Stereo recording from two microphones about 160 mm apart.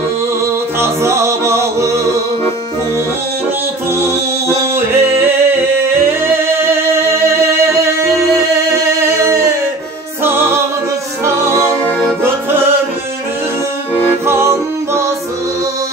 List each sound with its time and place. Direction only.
0.7 s music: 15° right (ahead or behind)
3.9 s music: 20° right (ahead or behind)
8.7 s singing: 20° right (ahead or behind)
10.2 s music: 15° right (ahead or behind)
14.2 s music: 15° right (ahead or behind)